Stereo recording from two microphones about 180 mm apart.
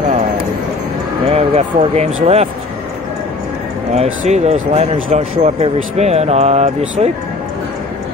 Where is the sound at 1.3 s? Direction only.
35° right (ahead or behind).